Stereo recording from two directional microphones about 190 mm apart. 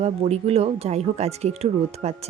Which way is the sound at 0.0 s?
35° right (ahead or behind).